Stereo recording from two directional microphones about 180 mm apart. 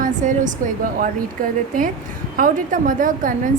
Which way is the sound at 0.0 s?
45° right (ahead or behind).